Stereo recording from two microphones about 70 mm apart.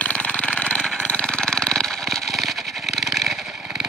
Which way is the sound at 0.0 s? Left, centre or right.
Centre.